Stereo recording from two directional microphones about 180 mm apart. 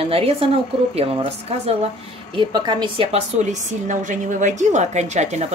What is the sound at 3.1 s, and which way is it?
A woman's voice, 45° right (ahead or behind).